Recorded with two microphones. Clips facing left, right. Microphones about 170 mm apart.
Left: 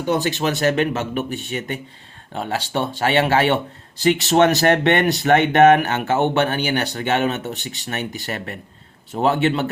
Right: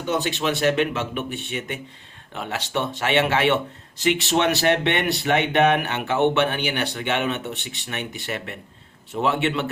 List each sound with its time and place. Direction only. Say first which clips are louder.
0.1 s speech: left 3 dB; 40° left (ahead or behind)